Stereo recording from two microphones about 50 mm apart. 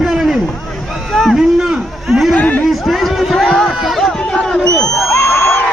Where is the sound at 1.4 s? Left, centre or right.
Centre.